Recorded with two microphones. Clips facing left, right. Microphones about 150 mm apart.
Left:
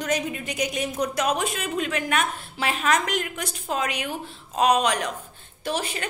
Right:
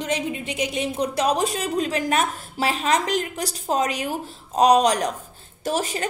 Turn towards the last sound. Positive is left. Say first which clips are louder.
# right 4 dB
turn(degrees=-40)  # may be behind; listen again after turning